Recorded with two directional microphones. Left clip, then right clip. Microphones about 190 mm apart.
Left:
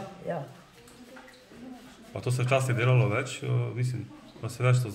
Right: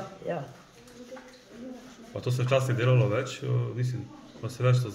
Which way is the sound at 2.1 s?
15° left (ahead or behind).